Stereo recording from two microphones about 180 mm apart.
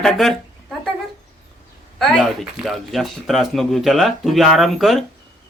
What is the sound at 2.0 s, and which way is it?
Speech, centre (ahead or behind).